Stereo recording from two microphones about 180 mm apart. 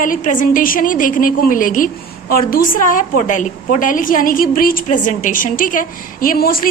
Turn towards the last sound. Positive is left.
turn(degrees=55)  # may be behind; listen again after turning